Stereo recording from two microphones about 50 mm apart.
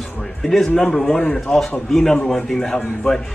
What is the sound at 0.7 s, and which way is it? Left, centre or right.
Speech, left.